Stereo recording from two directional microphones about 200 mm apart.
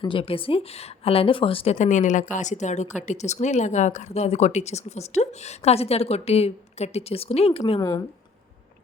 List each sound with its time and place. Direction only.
0.0 s a woman's voice: 25° left (ahead or behind)
7.6 s a woman's voice: 15° left (ahead or behind)